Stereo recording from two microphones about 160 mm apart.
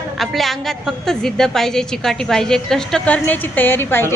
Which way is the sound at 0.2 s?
Centre (ahead or behind).